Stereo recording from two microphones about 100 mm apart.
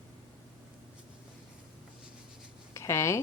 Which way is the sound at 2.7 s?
30° left (ahead or behind).